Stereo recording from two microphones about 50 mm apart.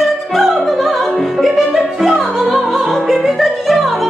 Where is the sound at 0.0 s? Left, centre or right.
Centre.